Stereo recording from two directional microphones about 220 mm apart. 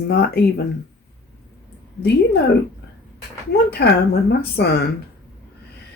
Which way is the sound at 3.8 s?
50° left (ahead or behind).